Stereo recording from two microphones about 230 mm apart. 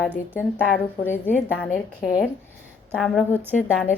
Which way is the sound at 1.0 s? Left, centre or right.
Centre.